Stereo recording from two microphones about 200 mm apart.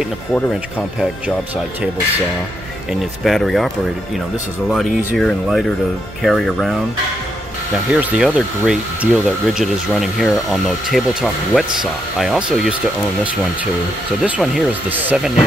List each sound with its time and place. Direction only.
2.9 s speech: centre (ahead or behind)
7.9 s speech: 5° right (ahead or behind)